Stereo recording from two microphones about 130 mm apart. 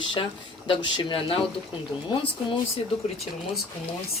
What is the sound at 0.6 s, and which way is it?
Speech, 40° left (ahead or behind).